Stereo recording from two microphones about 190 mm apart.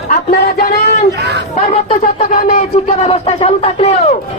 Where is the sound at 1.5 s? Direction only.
30° left (ahead or behind).